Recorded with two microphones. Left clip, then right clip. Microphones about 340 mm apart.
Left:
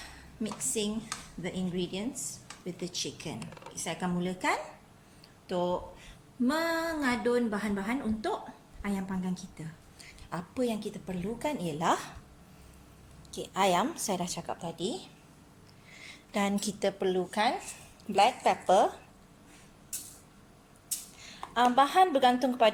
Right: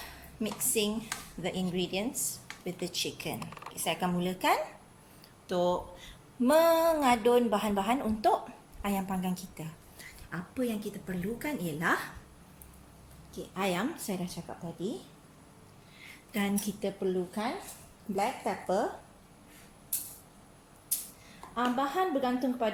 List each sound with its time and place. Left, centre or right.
0.0 s a sound: centre
1.4 s a woman's voice: centre
10.2 s a woman's voice: centre
13.5 s a woman's voice: left
14.3 s speech: left
16.0 s a sound: centre
17.0 s a woman's voice: left
21.5 s a woman's voice: left